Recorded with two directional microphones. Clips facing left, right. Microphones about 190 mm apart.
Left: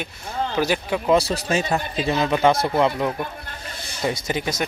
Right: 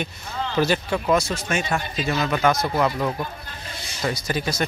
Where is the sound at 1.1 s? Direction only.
35° left (ahead or behind); by 4.7 s 20° left (ahead or behind).